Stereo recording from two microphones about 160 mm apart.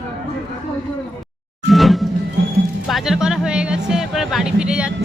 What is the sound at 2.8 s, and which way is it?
Speech, centre (ahead or behind).